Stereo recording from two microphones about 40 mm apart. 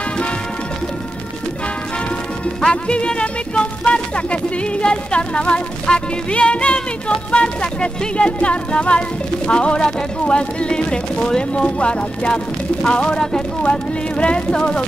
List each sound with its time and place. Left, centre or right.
2.7 s speech: left